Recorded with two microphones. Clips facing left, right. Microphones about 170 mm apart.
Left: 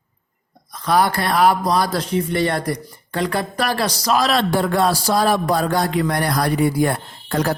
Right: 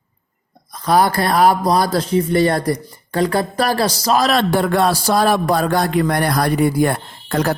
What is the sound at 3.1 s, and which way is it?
A man's voice, 35° right (ahead or behind).